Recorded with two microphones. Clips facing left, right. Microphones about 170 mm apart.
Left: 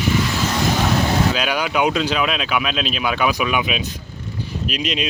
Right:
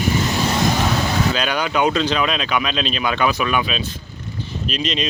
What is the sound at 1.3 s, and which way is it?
Speech, 10° left (ahead or behind).